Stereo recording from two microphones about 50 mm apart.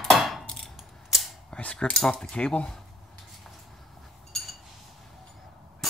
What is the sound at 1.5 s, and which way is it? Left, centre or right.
Cutlery, centre.